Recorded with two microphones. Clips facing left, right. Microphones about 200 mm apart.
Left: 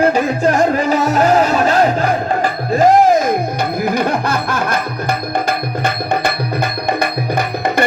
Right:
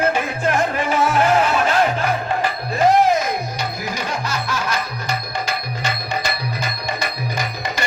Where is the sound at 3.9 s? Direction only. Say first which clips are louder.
Left 9 dB; 55° left (ahead or behind).